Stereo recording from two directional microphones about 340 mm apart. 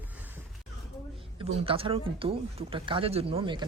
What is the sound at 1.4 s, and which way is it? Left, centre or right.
Speech, centre.